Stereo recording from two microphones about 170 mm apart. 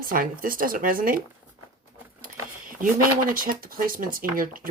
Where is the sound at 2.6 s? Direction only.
55° right (ahead or behind).